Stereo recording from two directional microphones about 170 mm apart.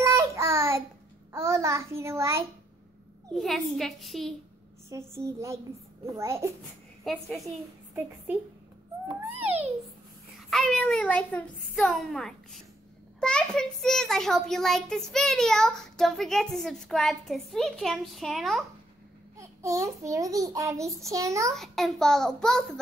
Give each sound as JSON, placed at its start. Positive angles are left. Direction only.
{"t": 0.0, "sound": "child singing", "side_deg": -15}
{"t": 1.3, "sound": "a child's voice", "side_deg": -15}
{"t": 3.3, "sound": "a child's voice", "side_deg": 0}
{"t": 4.8, "sound": "a child's voice", "side_deg": -15}
{"t": 7.1, "sound": "a child's voice", "side_deg": 0}
{"t": 7.4, "sound": "a woman's voice", "side_deg": -10}
{"t": 9.4, "sound": "a child's voice", "side_deg": -10}
{"t": 10.5, "sound": "a child's voice", "side_deg": 5}
{"t": 19.3, "sound": "a child's voice", "side_deg": -15}
{"t": 21.5, "sound": "a child's voice", "side_deg": 0}